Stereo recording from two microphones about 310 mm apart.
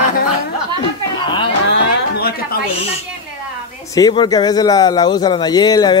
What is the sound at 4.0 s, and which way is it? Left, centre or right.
Speech, centre.